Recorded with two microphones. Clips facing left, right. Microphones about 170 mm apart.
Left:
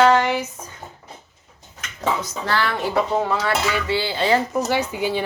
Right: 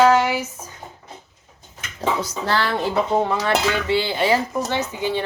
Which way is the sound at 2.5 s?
30° right (ahead or behind).